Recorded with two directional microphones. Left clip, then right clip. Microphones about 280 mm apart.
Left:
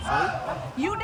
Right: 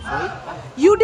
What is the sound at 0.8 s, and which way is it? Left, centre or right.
Speech, centre.